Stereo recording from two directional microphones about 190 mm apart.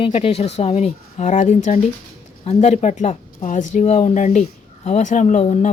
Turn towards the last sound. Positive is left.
turn(degrees=35)  # may be behind; listen again after turning